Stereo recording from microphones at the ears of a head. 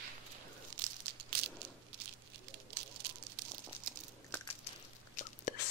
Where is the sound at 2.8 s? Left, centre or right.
Right.